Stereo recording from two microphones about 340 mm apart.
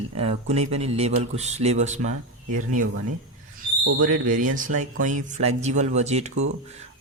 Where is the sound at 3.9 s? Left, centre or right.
Right.